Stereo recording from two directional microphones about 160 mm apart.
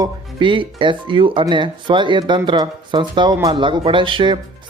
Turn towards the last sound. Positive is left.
turn(degrees=-30)  # may be behind; listen again after turning